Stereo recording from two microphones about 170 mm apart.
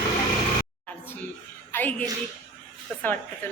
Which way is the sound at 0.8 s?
10° left (ahead or behind).